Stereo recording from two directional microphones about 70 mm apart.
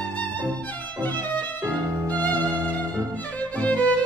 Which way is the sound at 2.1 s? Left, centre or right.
Right.